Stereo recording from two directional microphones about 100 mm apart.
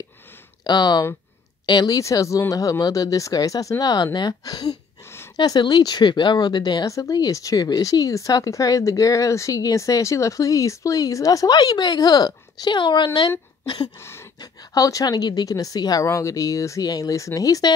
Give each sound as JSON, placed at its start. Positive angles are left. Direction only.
{"t": 0.7, "sound": "speech", "side_deg": 45}
{"t": 2.0, "sound": "speech", "side_deg": 30}
{"t": 13.9, "sound": "a sound", "side_deg": 25}
{"t": 14.4, "sound": "speech", "side_deg": 40}